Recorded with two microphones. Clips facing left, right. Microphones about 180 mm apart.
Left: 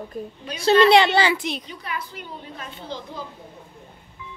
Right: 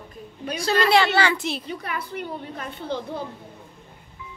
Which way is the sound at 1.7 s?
55° right (ahead or behind).